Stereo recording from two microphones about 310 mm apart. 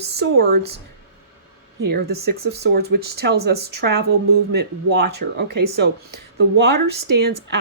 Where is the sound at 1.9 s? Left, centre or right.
Right.